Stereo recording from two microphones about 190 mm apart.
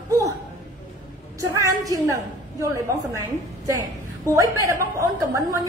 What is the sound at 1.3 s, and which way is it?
A woman's voice, 15° right (ahead or behind).